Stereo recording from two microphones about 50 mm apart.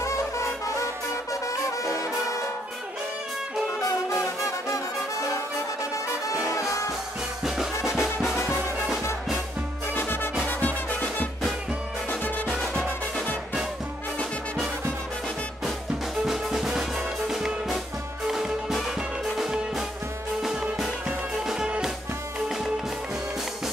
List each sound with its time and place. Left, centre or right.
0.0 s music: left
2.0 s music: left
3.8 s music: left
6.4 s music: left
7.4 s music: centre
9.9 s music: left
10.4 s music: left
16.3 s music: centre
18.2 s music: centre
21.5 s music: centre